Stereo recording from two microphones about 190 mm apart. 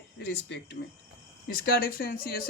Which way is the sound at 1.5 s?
50° left (ahead or behind).